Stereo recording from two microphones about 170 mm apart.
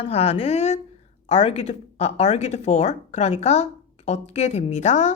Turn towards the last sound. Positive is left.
turn(degrees=45)  # may be behind; listen again after turning